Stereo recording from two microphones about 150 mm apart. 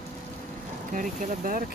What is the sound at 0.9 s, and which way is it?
Speech, 60° right (ahead or behind).